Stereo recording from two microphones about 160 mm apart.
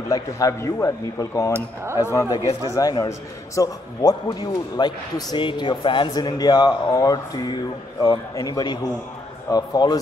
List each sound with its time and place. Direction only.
0.1 s a man's voice: 20° left (ahead or behind)